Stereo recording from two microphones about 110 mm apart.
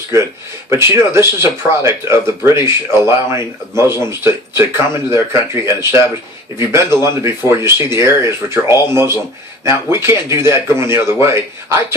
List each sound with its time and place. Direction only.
0.7 s speech: 25° right (ahead or behind)